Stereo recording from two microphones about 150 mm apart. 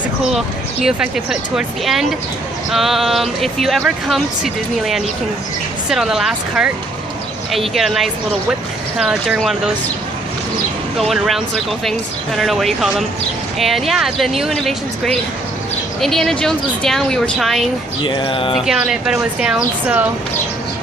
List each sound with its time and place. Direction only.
0.8 s speech: 5° right (ahead or behind)
11.0 s speech: centre (ahead or behind)
18.0 s a sound: 35° left (ahead or behind)
18.7 s speech: 5° right (ahead or behind)